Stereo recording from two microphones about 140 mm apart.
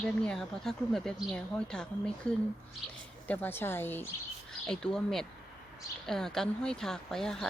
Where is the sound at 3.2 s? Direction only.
15° left (ahead or behind).